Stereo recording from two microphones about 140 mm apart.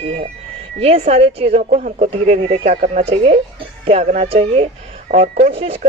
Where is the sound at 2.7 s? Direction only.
65° right (ahead or behind).